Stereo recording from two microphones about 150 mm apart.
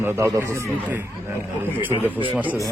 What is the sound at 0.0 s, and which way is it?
A man's voice, 15° right (ahead or behind).